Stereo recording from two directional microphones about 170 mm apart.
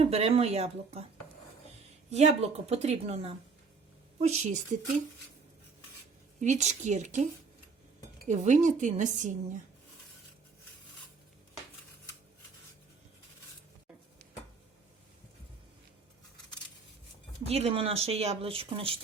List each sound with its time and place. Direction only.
0.0 s speech: 35° right (ahead or behind)
2.0 s speech: 40° right (ahead or behind)
6.4 s speech: 45° right (ahead or behind)
8.3 s speech: 45° right (ahead or behind)
17.4 s speech: 35° right (ahead or behind)